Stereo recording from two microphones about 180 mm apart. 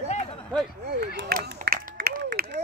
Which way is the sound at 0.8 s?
70° right (ahead or behind).